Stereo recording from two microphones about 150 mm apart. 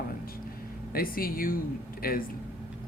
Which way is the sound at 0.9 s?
75° left (ahead or behind).